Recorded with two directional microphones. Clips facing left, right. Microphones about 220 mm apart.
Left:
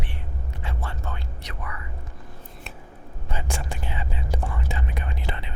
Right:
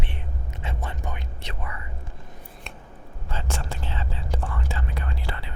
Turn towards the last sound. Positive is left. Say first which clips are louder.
# left 1 dB
turn(degrees=20)  # may be behind; listen again after turning